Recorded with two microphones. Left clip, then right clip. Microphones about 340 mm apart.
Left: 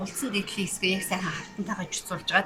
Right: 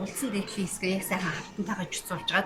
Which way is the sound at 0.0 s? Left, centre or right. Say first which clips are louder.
Left 2 dB; centre.